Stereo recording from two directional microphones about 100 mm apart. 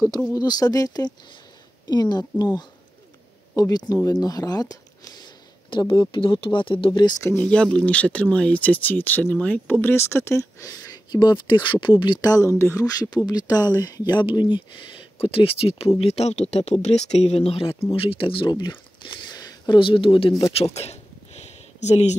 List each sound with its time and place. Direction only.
0.3 s speech: 40° left (ahead or behind)
7.4 s speech: 10° left (ahead or behind); by 11.0 s 30° left (ahead or behind)
11.1 s speech: 45° left (ahead or behind); by 12.8 s 25° left (ahead or behind)
12.8 s speech: 40° left (ahead or behind)
14.2 s speech: 55° left (ahead or behind)
15.1 s speech: 70° left (ahead or behind)
16.0 s speech: 90° left
17.9 s speech: 65° left (ahead or behind)
20.5 s a sound: 85° left